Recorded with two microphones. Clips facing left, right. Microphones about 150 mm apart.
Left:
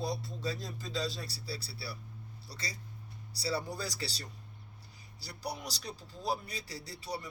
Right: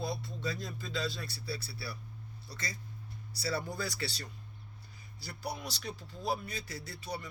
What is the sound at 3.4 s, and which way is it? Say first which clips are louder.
Music: even; 30° left (ahead or behind).